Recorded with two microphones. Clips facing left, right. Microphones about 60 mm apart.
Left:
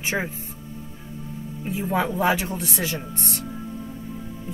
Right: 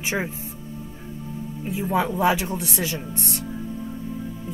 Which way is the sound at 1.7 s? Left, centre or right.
Centre.